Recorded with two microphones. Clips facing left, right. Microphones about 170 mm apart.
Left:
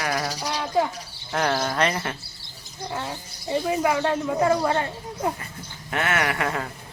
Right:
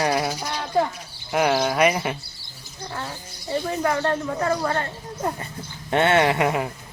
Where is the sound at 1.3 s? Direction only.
10° right (ahead or behind).